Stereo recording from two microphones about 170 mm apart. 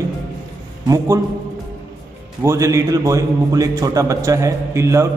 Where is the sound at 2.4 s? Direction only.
20° right (ahead or behind).